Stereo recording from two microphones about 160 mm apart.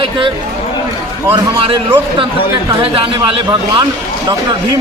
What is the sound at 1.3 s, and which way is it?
A man's voice, 35° right (ahead or behind).